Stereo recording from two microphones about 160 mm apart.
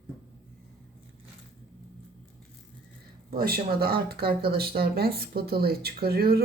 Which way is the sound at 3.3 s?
65° right (ahead or behind).